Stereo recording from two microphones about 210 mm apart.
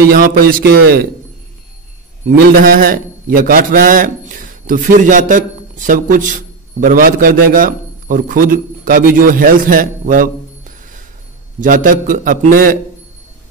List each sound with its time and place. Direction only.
0.1 s speech: 45° right (ahead or behind)
2.2 s a man's voice: 45° right (ahead or behind)
11.6 s a man's voice: 40° right (ahead or behind)